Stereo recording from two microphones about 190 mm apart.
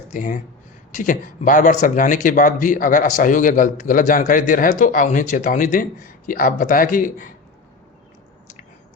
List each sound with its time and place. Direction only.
0.1 s speech: 45° left (ahead or behind)